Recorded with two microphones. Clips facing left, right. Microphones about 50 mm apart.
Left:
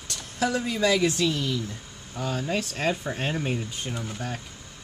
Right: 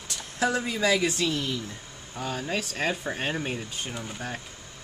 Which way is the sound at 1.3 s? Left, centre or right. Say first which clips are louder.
Left 2 dB; right.